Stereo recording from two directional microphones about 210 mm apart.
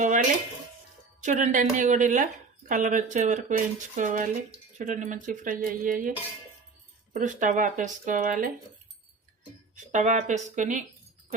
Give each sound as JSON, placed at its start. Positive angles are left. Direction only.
{"t": 0.0, "sound": "speech", "side_deg": -35}
{"t": 9.7, "sound": "speech", "side_deg": -35}